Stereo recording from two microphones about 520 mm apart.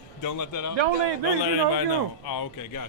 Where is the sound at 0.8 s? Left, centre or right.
Right.